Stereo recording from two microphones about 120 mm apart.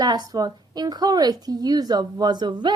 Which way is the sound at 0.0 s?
35° right (ahead or behind).